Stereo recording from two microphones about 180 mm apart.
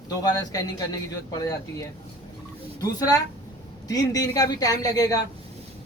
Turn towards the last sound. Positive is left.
turn(degrees=20)  # may be behind; listen again after turning